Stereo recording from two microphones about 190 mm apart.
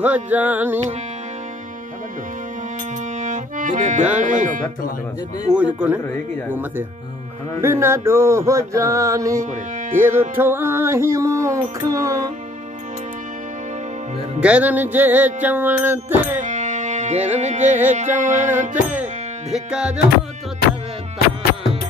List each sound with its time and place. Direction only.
0.0 s music: 10° right (ahead or behind)
3.2 s accordion: 40° right (ahead or behind)
4.2 s music: 40° right (ahead or behind)
5.5 s music: 5° right (ahead or behind)
6.0 s speech: 10° left (ahead or behind)
7.6 s music: 15° right (ahead or behind)
9.5 s speech: 40° right (ahead or behind)
10.3 s music: 10° right (ahead or behind)
14.4 s music: 5° right (ahead or behind)
16.3 s music: 40° right (ahead or behind)
19.5 s music: 5° right (ahead or behind)